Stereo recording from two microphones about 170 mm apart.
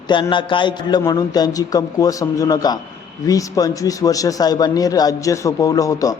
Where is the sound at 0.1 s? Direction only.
30° left (ahead or behind).